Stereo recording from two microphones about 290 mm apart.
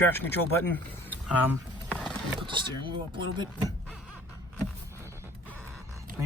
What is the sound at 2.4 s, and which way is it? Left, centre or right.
Speech, centre.